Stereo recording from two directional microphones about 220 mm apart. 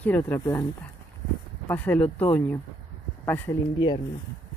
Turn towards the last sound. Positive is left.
turn(degrees=20)  # may be behind; listen again after turning